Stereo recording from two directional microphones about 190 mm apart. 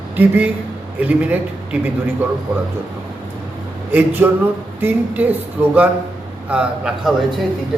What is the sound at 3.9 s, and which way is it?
A man's voice, 10° right (ahead or behind).